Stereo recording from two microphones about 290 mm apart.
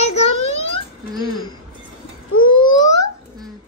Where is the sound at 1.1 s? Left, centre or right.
Centre.